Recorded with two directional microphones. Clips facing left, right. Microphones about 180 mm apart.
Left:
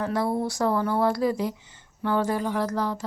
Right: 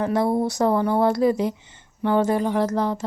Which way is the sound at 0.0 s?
20° right (ahead or behind).